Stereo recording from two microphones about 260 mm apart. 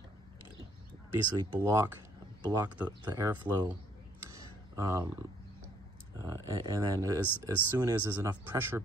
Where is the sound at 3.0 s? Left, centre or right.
Centre.